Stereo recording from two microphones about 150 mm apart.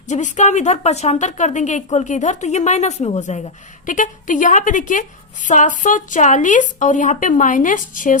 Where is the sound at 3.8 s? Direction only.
60° left (ahead or behind).